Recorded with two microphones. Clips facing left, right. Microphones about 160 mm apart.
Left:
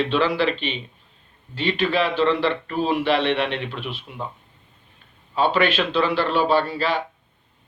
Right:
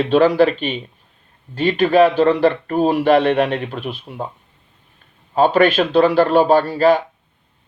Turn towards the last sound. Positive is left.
turn(degrees=-45)  # may be behind; listen again after turning